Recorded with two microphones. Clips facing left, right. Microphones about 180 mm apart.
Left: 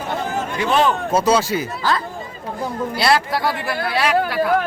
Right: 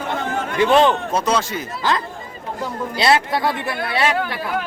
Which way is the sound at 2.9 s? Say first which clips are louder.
Right 1 dB; 25° right (ahead or behind).